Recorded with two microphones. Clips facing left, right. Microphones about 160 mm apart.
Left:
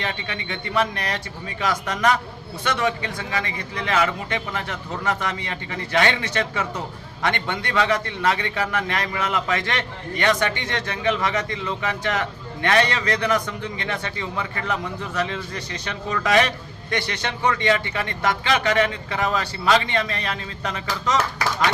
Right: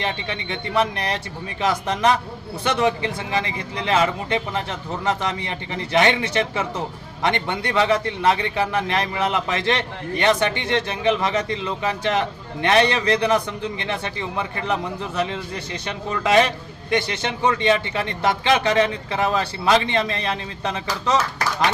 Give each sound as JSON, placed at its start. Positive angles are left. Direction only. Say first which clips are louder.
{"t": 0.0, "sound": "a man's voice", "louder": "right 3 dB", "side_deg": -25}